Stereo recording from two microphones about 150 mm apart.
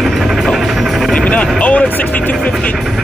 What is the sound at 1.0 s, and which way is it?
Vehicle, 5° left (ahead or behind).